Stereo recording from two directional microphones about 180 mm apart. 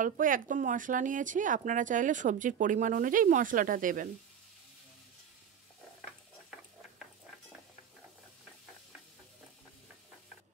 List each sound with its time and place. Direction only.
0.0 s speech: 45° right (ahead or behind)